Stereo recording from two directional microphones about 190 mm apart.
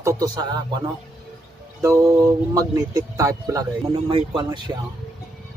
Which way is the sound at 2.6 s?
20° right (ahead or behind).